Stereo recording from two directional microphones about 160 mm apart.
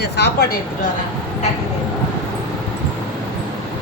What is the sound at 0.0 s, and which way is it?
Speech, 90° left.